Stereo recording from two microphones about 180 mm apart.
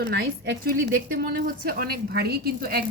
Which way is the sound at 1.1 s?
55° right (ahead or behind).